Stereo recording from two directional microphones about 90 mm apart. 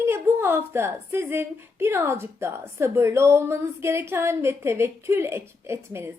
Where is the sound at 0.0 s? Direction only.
30° right (ahead or behind).